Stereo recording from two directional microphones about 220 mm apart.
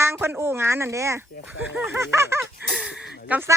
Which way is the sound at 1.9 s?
10° right (ahead or behind).